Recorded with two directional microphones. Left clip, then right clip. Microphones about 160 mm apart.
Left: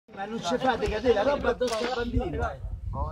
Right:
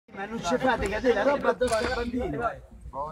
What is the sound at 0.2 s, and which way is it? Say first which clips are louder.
Speech: right 1 dB; 25° left (ahead or behind).